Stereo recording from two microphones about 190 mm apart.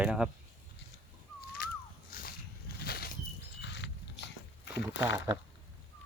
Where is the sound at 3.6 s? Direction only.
65° left (ahead or behind).